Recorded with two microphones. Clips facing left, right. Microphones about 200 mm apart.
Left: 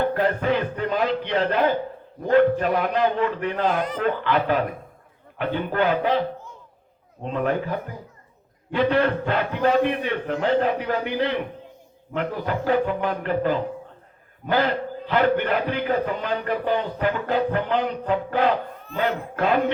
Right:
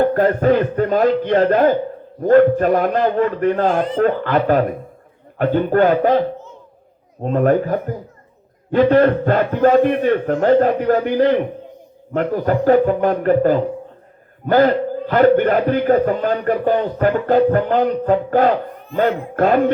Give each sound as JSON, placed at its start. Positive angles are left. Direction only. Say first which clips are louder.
{"t": 0.0, "sound": "a man's voice", "louder": "right 7 dB", "side_deg": -45}